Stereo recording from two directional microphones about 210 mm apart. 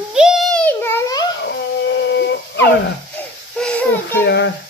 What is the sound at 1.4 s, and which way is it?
Dog, 60° left (ahead or behind).